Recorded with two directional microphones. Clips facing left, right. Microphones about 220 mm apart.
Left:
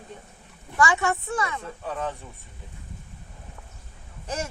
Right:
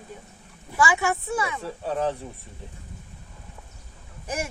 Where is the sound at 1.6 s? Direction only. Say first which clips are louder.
Right 5 dB; 30° right (ahead or behind).